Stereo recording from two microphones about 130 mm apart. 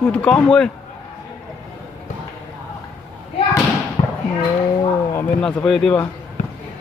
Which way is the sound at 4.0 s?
40° left (ahead or behind).